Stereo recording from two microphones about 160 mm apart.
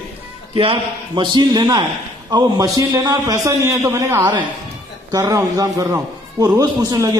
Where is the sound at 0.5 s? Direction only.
35° right (ahead or behind).